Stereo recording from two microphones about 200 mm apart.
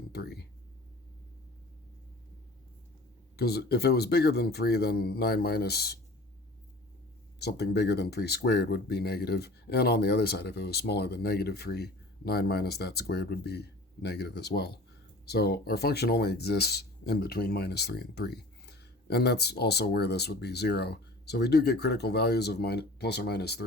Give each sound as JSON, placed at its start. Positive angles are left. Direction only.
{"t": 0.1, "sound": "speech", "side_deg": 55}
{"t": 3.3, "sound": "speech", "side_deg": 55}
{"t": 7.3, "sound": "speech", "side_deg": 55}